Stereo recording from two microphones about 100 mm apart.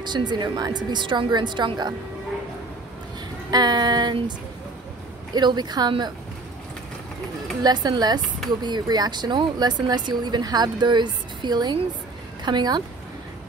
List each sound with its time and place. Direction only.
0.0 s speech: 45° right (ahead or behind)
3.4 s speech: 45° right (ahead or behind)
5.3 s speech: 45° right (ahead or behind)
7.6 s speech: 45° right (ahead or behind)